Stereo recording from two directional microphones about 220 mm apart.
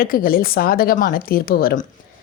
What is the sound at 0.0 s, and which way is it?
A woman's voice, 40° left (ahead or behind).